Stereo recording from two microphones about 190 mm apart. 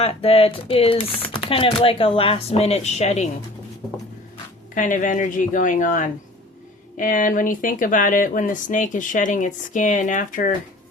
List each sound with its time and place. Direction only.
0.0 s speech: 30° left (ahead or behind)
4.7 s speech: 45° left (ahead or behind)